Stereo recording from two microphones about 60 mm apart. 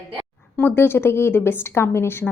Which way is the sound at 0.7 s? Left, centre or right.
Left.